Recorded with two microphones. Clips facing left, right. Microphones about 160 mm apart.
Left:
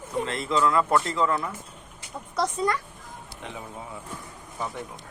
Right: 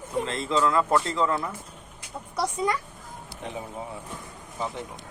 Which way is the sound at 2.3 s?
15° right (ahead or behind).